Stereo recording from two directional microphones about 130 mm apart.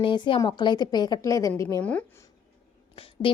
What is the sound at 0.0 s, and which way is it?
Speech, 40° left (ahead or behind).